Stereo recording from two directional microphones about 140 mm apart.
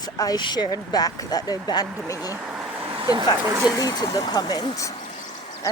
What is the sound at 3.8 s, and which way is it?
Speech, 25° left (ahead or behind).